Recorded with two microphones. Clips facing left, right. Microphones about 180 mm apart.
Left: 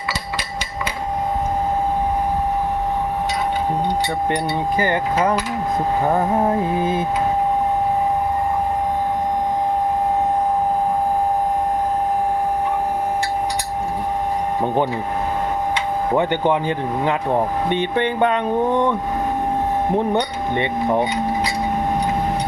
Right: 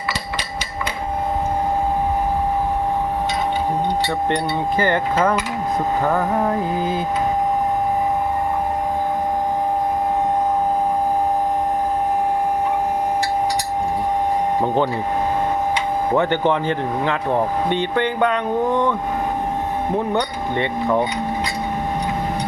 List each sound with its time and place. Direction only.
4.8 s speech: 15° left (ahead or behind)
16.1 s speech: 15° left (ahead or behind)
20.0 s speech: 25° left (ahead or behind)